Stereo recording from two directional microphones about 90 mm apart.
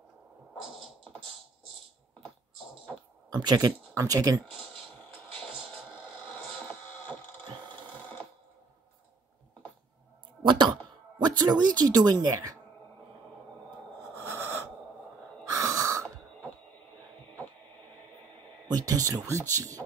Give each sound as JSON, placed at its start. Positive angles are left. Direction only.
{"t": 3.3, "sound": "speech", "side_deg": -50}
{"t": 10.4, "sound": "a sound", "side_deg": -65}
{"t": 11.1, "sound": "music", "side_deg": -50}
{"t": 11.8, "sound": "speech", "side_deg": -50}
{"t": 14.2, "sound": "a sound", "side_deg": -30}
{"t": 15.4, "sound": "gasp", "side_deg": -35}
{"t": 18.7, "sound": "speech", "side_deg": -45}